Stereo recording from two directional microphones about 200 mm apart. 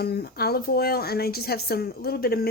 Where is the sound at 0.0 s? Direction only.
50° left (ahead or behind).